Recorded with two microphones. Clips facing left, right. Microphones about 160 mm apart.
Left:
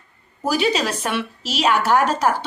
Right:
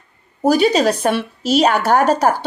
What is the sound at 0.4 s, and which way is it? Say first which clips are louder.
A woman's voice: right 7 dB; 40° right (ahead or behind).